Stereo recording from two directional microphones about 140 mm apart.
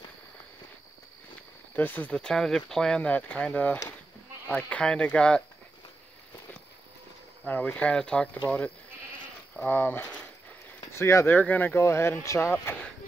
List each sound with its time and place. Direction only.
1.8 s speech: 10° left (ahead or behind)
7.4 s speech: 10° left (ahead or behind)